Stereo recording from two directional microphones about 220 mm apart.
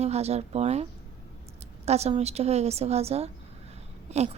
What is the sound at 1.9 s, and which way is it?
A woman's voice, 30° right (ahead or behind).